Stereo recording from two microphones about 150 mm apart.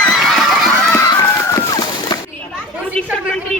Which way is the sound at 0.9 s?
20° left (ahead or behind).